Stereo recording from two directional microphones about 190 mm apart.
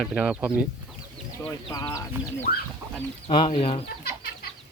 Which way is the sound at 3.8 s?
55° left (ahead or behind).